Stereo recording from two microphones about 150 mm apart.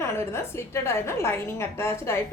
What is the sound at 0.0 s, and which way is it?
A woman's voice, 15° left (ahead or behind).